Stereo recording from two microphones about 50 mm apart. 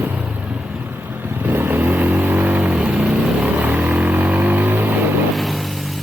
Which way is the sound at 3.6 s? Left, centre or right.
Right.